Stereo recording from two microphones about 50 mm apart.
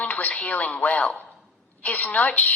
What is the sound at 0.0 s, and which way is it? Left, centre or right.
A woman's voice, left.